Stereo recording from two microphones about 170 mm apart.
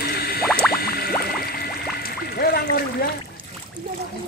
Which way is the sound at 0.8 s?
65° left (ahead or behind).